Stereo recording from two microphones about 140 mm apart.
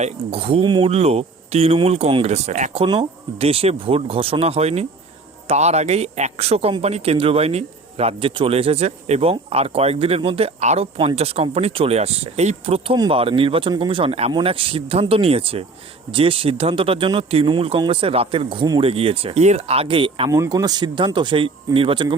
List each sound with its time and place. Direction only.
0.0 s speech: 45° right (ahead or behind)
2.7 s speech: 40° right (ahead or behind)
20.3 s speech: 25° right (ahead or behind)